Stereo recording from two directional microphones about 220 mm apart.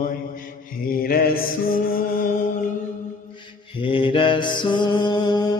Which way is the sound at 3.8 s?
25° left (ahead or behind).